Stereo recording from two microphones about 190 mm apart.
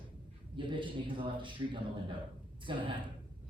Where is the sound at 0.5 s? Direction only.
25° right (ahead or behind).